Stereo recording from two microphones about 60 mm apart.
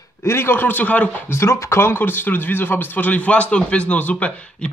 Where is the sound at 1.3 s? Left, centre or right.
Left; by 4.6 s centre.